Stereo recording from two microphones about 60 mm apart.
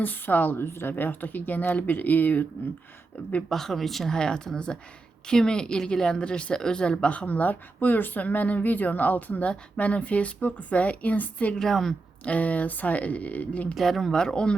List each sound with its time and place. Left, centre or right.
0.0 s a woman's voice: left
3.5 s speech: centre; by 11.5 s left
11.5 s speech: centre
12.2 s speech: left
13.7 s speech: centre